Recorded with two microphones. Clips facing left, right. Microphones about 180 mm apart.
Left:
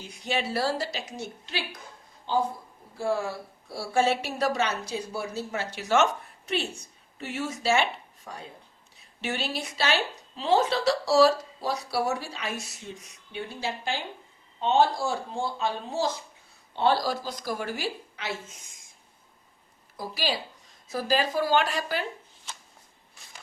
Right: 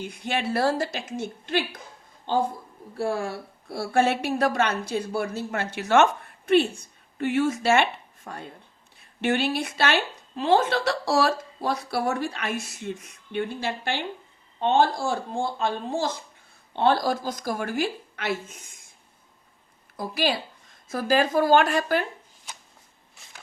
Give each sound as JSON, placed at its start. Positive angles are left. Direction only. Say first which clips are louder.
{"t": 0.0, "sound": "a woman's voice", "louder": "right 2 dB", "side_deg": -55}
{"t": 2.9, "sound": "a woman's voice", "louder": "right 1 dB", "side_deg": -60}
{"t": 20.0, "sound": "a woman's voice", "louder": "right 4 dB", "side_deg": -55}